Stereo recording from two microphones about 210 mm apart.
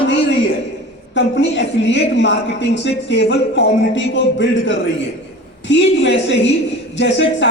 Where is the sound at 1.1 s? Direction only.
60° left (ahead or behind).